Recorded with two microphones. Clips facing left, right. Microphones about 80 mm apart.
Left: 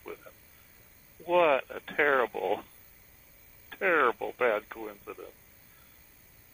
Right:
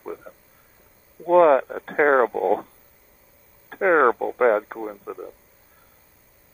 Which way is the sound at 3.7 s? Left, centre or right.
Right.